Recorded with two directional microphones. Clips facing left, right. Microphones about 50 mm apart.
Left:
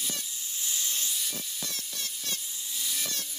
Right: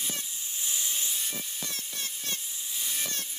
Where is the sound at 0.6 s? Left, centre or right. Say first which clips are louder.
Even; right.